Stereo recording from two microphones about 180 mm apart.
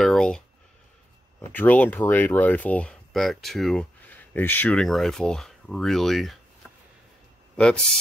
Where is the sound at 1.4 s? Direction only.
10° left (ahead or behind).